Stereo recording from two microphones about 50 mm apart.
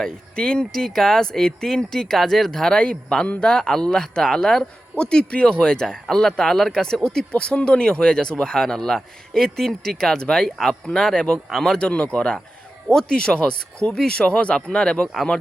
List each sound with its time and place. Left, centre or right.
0.0 s speech: centre